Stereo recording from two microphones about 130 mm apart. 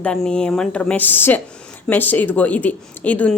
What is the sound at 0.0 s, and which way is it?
A woman's voice, 10° left (ahead or behind).